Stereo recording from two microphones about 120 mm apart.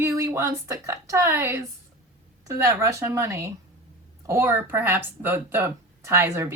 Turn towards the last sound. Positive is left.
turn(degrees=-25)  # may be behind; listen again after turning